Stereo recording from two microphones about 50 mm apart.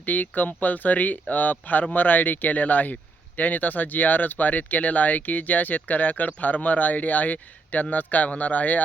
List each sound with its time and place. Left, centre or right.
0.0 s speech: left